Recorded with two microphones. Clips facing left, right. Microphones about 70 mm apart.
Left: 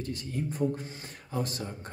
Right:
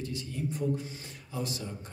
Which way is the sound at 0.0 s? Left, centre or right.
Left.